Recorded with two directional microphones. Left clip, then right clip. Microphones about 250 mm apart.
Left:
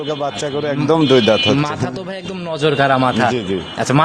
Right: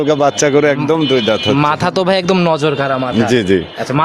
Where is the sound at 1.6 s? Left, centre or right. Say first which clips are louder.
Right 8 dB; right.